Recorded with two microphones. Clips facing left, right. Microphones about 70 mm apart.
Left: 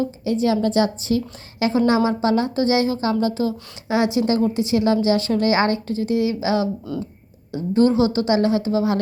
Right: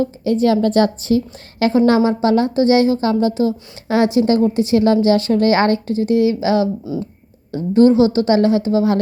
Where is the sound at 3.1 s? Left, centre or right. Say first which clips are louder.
Right 4 dB; right.